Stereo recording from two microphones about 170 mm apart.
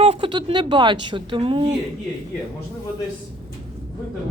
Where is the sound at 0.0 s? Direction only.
30° right (ahead or behind).